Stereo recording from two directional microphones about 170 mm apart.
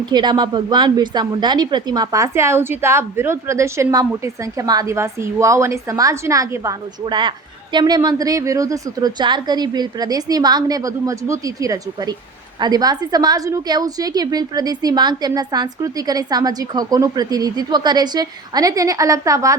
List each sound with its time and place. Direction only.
0.0 s a woman's voice: 25° right (ahead or behind)